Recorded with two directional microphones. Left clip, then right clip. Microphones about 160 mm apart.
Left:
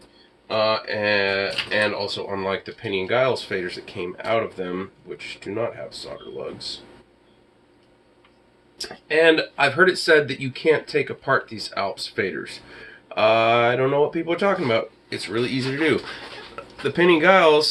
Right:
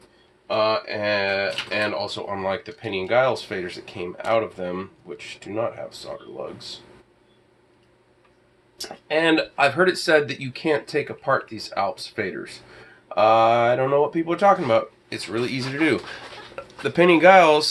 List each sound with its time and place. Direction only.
0.5 s speech: 30° right (ahead or behind)
8.8 s speech: 35° right (ahead or behind)
16.9 s speech: 40° right (ahead or behind)